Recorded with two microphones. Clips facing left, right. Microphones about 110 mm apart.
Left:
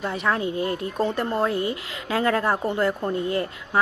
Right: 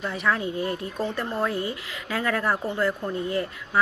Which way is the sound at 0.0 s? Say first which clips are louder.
Left 2 dB; 25° left (ahead or behind).